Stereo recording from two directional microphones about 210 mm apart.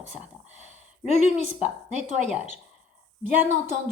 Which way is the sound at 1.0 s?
30° left (ahead or behind).